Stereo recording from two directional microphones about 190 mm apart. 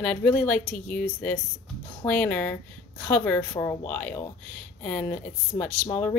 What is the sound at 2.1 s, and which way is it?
Speech, 10° left (ahead or behind).